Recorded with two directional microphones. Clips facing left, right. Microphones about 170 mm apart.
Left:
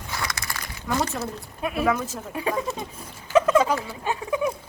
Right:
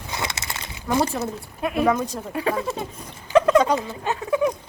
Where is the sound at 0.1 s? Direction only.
20° right (ahead or behind).